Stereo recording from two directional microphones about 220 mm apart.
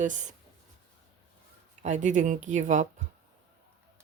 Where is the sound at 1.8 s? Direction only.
35° right (ahead or behind).